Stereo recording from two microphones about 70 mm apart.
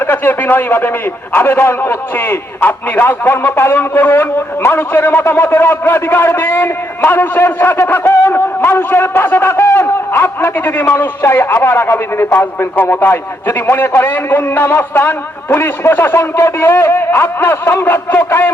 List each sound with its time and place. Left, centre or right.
0.1 s a man's voice: left